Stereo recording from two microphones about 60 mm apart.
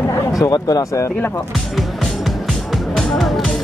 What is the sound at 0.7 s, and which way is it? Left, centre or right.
Speech, left.